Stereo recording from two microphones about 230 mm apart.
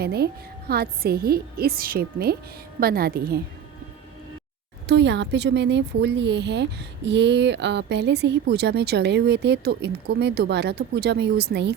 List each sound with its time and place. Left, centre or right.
0.0 s speech: right
4.9 s speech: right